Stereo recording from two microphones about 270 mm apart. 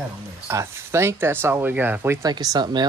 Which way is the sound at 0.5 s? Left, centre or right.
Centre.